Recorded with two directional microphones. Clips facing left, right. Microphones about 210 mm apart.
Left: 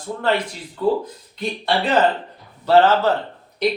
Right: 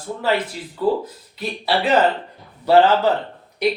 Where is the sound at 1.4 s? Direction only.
5° right (ahead or behind).